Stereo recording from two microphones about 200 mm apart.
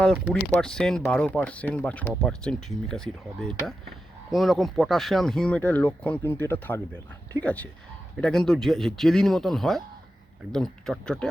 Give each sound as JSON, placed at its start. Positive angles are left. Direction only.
{"t": 0.6, "sound": "speech", "side_deg": 5}